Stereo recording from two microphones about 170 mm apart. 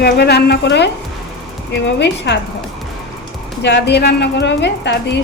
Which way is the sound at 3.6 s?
85° left.